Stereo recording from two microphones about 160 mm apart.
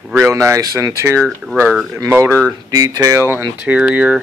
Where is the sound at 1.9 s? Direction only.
15° right (ahead or behind).